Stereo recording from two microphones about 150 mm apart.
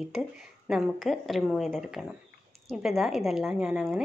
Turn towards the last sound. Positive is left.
turn(degrees=-5)  # may be behind; listen again after turning